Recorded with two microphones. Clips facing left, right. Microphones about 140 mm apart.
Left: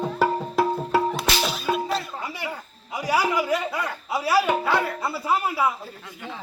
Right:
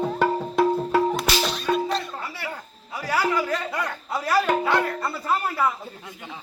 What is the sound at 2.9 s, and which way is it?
Speech, 15° left (ahead or behind).